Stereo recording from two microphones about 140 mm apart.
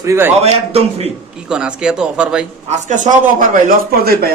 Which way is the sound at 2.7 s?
60° right (ahead or behind).